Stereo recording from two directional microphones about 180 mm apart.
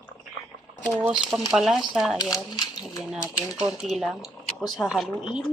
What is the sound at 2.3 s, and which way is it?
Speech, 20° left (ahead or behind).